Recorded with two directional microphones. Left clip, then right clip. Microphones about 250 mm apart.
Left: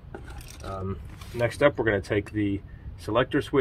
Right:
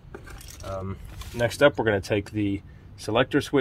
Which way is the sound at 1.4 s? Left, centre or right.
Right.